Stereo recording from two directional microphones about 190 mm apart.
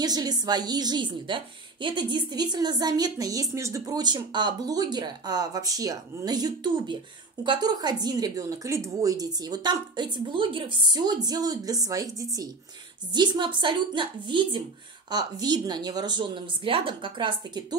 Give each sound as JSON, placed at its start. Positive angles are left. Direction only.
{"t": 0.0, "sound": "a woman's voice", "side_deg": -20}